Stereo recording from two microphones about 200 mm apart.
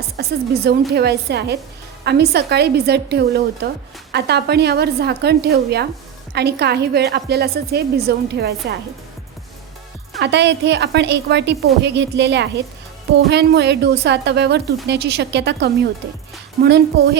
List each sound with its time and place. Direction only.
0.2 s a woman's voice: 50° right (ahead or behind)
10.2 s a woman's voice: 60° right (ahead or behind)